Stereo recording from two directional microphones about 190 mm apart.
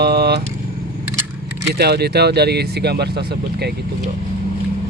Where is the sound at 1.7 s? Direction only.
60° right (ahead or behind).